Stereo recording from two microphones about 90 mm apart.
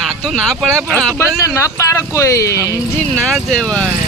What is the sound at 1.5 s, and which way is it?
Speech, 35° left (ahead or behind).